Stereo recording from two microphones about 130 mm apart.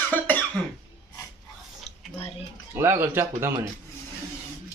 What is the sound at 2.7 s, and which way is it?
Speech, 15° right (ahead or behind).